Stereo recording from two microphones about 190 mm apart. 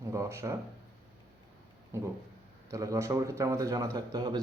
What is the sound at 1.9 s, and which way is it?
A man's voice, 15° right (ahead or behind).